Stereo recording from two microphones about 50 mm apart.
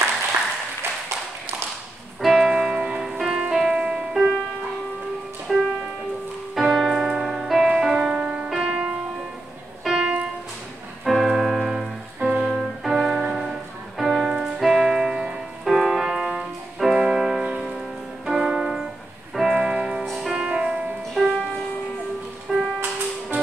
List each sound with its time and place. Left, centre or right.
2.2 s music: centre
5.5 s music: centre
6.5 s keyboard: centre
7.2 s music: centre
8.1 s music: right
8.5 s music: centre
11.1 s keyboard: centre
12.2 s music: centre
19.3 s music: centre
20.3 s music: centre
21.1 s music: centre
22.5 s music: centre